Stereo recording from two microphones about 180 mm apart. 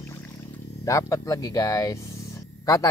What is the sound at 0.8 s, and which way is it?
Speech, 15° left (ahead or behind).